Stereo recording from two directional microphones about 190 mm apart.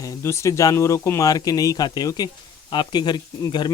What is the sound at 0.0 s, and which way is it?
Speech, 15° left (ahead or behind).